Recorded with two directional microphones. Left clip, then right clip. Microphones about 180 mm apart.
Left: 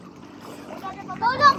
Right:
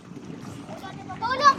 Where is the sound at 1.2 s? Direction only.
5° right (ahead or behind).